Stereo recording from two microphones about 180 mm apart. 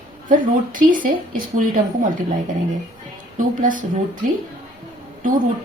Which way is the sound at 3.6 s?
50° right (ahead or behind).